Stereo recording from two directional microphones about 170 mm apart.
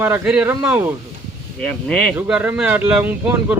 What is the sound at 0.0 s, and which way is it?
Speech, 10° right (ahead or behind).